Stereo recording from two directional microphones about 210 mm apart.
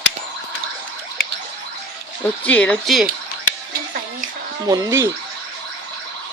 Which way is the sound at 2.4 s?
5° left (ahead or behind).